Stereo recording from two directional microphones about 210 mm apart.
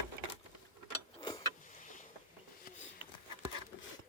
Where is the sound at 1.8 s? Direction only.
35° left (ahead or behind).